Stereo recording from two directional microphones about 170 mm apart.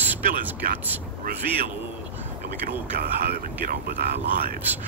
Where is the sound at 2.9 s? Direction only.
65° right (ahead or behind).